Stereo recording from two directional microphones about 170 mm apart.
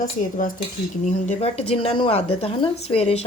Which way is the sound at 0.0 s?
50° left (ahead or behind).